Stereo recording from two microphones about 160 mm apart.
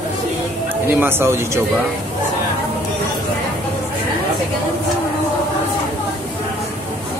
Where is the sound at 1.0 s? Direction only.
15° right (ahead or behind).